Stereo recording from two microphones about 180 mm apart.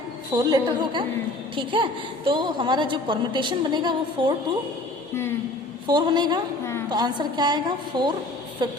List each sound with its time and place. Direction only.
0.3 s a woman's voice: 25° right (ahead or behind)
5.9 s a woman's voice: 25° right (ahead or behind)